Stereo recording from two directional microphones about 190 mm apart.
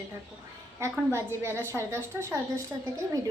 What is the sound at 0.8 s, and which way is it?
A woman's voice, 15° right (ahead or behind).